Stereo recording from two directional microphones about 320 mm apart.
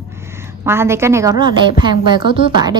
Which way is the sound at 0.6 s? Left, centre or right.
Centre.